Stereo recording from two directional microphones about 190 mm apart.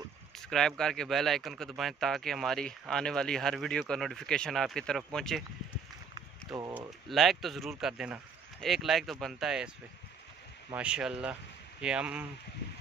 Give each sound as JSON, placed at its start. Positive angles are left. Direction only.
{"t": 0.4, "sound": "speech", "side_deg": 0}
{"t": 6.7, "sound": "speech", "side_deg": 0}
{"t": 10.7, "sound": "speech", "side_deg": -5}